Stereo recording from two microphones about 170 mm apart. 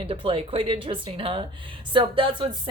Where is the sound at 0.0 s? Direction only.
30° right (ahead or behind).